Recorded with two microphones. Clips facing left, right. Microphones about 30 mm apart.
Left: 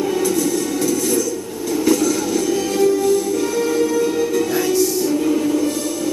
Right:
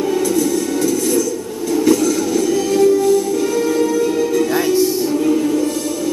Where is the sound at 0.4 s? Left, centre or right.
Centre.